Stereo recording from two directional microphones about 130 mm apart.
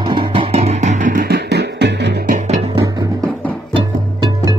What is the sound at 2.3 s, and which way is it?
Music, 65° right (ahead or behind).